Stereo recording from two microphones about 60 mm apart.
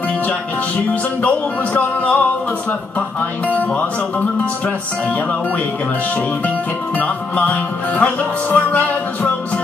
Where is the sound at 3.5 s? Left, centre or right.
Left.